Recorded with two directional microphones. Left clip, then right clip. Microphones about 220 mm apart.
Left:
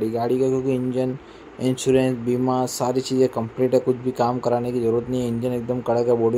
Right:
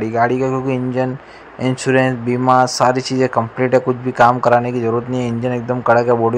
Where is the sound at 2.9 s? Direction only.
35° right (ahead or behind).